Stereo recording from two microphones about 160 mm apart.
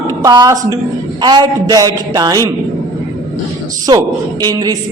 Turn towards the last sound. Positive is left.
turn(degrees=-25)  # may be behind; listen again after turning